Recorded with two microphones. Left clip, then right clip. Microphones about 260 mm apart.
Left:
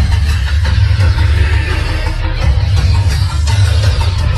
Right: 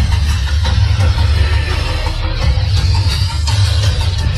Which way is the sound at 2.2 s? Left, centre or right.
Centre.